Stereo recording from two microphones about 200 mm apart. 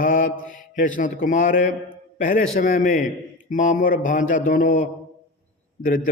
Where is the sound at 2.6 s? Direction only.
40° left (ahead or behind).